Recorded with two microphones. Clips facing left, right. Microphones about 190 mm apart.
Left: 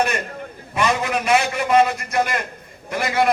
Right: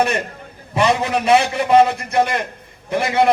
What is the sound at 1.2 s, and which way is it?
A man's voice, 30° right (ahead or behind).